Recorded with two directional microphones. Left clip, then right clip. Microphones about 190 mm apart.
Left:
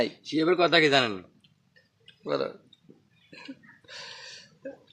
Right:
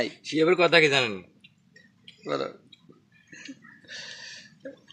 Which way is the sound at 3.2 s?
15° left (ahead or behind).